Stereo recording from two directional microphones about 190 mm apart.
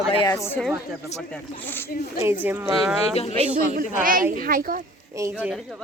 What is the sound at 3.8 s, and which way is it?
A woman's voice, 45° right (ahead or behind).